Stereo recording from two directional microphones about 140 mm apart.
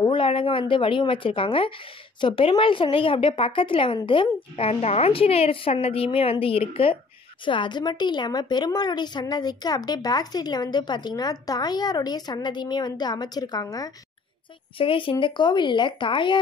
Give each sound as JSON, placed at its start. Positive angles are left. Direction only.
{"t": 0.0, "sound": "a woman's voice", "side_deg": 40}
{"t": 14.8, "sound": "speech", "side_deg": 40}